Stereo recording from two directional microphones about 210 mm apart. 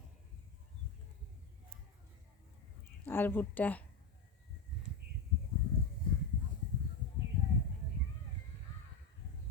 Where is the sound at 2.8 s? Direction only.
10° left (ahead or behind).